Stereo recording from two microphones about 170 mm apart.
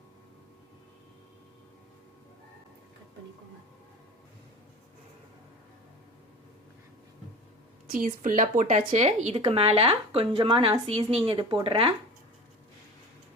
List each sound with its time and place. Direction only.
7.9 s speech: 55° right (ahead or behind); by 11.9 s 30° right (ahead or behind)